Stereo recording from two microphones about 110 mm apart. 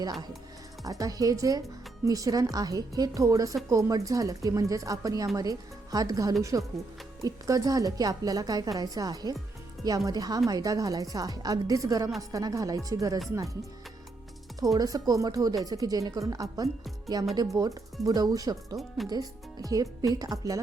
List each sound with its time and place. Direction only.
0.0 s speech: 40° right (ahead or behind)
14.6 s speech: 30° right (ahead or behind)